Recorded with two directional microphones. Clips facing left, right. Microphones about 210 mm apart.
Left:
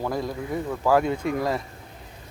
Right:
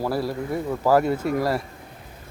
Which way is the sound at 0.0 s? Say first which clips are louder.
Right 3 dB; 5° right (ahead or behind).